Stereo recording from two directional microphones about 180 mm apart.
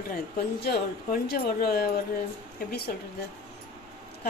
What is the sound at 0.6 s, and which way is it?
Music, 60° left (ahead or behind).